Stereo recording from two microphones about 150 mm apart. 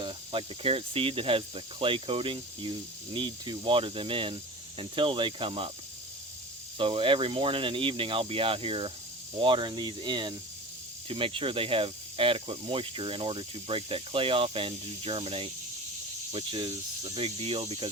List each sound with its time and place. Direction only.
0.0 s speech: 35° right (ahead or behind)
6.7 s speech: 35° right (ahead or behind)